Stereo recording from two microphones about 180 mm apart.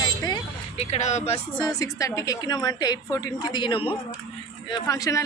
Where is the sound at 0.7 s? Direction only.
40° left (ahead or behind).